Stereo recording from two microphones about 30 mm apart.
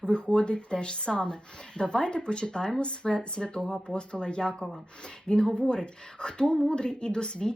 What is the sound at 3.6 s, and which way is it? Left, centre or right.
Speech, centre.